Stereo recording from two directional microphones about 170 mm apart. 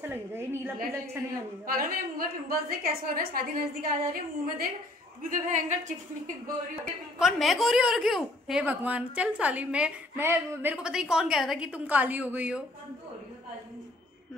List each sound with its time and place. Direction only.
0.0 s a woman's voice: 15° right (ahead or behind)
1.7 s a woman's voice: 60° right (ahead or behind)
5.3 s a woman's voice: 45° right (ahead or behind)
7.2 s a woman's voice: centre (ahead or behind)